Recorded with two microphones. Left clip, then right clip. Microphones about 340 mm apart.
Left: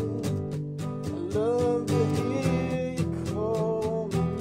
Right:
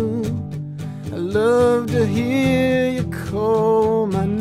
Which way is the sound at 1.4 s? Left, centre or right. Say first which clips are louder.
Right 10 dB; right.